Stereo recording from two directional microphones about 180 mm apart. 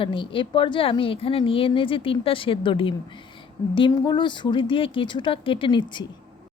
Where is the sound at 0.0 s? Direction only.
30° left (ahead or behind).